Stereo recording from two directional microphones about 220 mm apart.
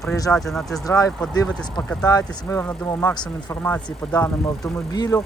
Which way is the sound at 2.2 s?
10° left (ahead or behind).